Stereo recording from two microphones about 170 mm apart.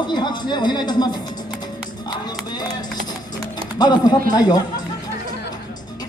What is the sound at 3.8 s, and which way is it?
Speech, 25° left (ahead or behind).